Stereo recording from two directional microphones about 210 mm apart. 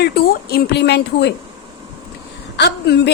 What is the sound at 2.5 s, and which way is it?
Speech, 50° left (ahead or behind).